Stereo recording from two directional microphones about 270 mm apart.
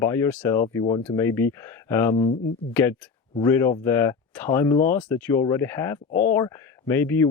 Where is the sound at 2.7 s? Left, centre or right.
Centre.